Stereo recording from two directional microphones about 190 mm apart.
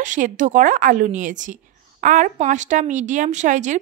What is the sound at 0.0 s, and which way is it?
A woman's voice, 40° right (ahead or behind).